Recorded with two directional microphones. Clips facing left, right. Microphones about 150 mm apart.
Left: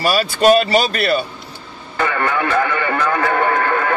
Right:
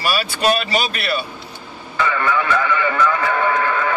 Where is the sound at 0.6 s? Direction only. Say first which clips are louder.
Left 6 dB; 40° left (ahead or behind).